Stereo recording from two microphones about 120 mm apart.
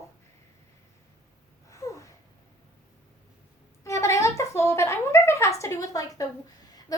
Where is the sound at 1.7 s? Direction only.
25° left (ahead or behind).